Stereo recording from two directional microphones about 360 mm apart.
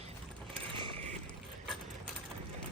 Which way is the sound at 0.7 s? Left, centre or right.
Centre.